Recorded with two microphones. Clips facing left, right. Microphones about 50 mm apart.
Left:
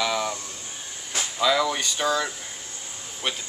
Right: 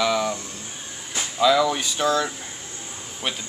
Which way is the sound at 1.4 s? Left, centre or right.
Centre.